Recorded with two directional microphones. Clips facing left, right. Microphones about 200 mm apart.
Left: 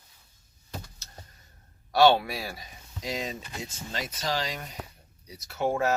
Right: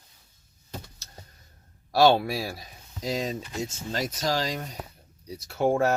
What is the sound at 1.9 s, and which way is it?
Speech, 35° right (ahead or behind).